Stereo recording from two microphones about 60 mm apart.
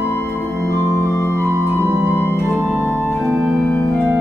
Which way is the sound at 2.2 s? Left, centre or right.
Left.